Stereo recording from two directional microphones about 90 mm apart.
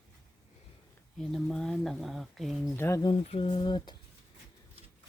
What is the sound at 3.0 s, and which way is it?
Mantra, 70° left (ahead or behind).